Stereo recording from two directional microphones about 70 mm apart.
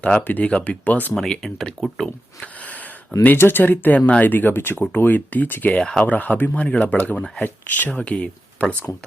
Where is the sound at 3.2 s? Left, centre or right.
Left.